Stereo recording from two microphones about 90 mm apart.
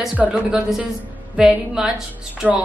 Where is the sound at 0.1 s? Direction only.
10° right (ahead or behind).